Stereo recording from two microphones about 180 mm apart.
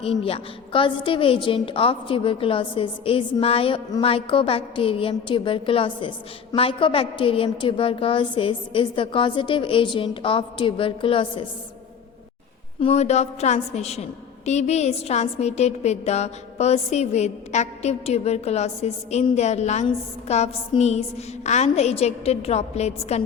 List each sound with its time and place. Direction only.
0.2 s a woman's voice: 30° left (ahead or behind)
12.8 s a woman's voice: 40° left (ahead or behind)